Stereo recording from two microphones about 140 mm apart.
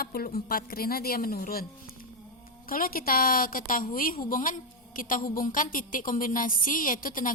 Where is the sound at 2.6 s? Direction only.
90° left.